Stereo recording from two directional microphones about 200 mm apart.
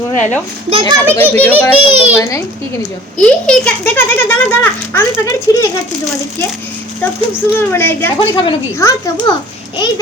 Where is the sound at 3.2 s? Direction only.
5° left (ahead or behind).